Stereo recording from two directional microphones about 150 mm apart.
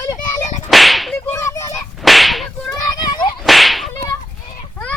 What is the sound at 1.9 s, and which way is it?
Whip, centre (ahead or behind).